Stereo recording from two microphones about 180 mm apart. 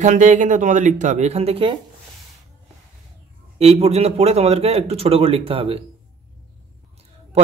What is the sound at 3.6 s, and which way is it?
A man's voice, 35° right (ahead or behind).